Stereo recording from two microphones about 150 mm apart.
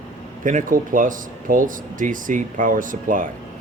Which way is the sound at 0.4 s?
60° right (ahead or behind).